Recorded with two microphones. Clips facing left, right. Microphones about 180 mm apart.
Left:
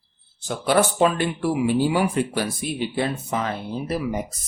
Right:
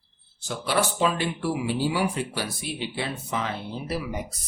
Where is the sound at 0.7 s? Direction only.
50° left (ahead or behind).